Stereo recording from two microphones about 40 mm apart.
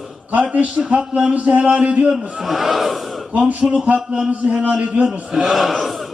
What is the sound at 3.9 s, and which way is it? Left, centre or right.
Speech, right.